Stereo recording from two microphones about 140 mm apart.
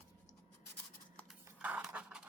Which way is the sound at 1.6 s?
10° right (ahead or behind).